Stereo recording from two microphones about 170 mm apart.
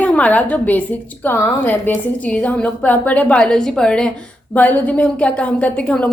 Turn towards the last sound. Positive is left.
turn(degrees=5)  # may be behind; listen again after turning